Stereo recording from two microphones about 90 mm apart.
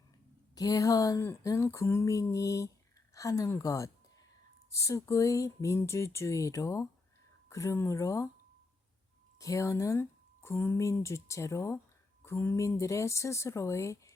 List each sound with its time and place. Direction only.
0.5 s speech: 40° left (ahead or behind)
9.4 s speech: 35° left (ahead or behind)